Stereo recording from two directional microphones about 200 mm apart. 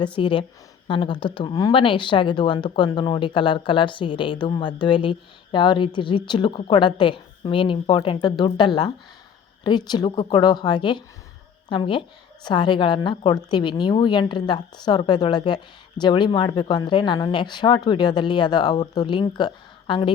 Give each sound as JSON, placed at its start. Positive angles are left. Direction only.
{"t": 0.0, "sound": "a woman's voice", "side_deg": 25}